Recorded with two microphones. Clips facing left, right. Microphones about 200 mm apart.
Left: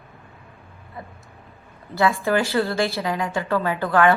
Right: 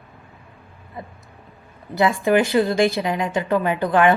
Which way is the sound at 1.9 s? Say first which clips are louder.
Right 3 dB; 20° right (ahead or behind).